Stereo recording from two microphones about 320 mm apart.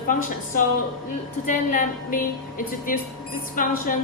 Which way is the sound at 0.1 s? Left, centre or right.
Left.